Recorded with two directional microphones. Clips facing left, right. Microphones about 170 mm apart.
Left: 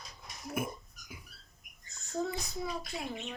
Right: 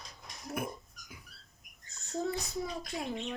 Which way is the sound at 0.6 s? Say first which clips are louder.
Left 2 dB; 5° left (ahead or behind).